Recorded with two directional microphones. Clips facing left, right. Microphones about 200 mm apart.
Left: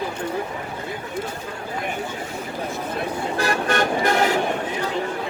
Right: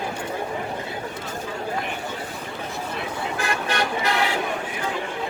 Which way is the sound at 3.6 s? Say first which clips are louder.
Left 4 dB; 50° left (ahead or behind).